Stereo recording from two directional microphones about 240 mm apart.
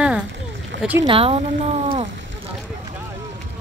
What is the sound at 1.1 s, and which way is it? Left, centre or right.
Speech, right.